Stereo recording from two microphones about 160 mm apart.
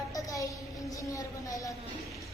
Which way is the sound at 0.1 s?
20° left (ahead or behind).